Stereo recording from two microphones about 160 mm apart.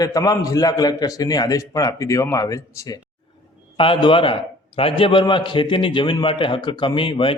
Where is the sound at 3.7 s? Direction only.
35° left (ahead or behind).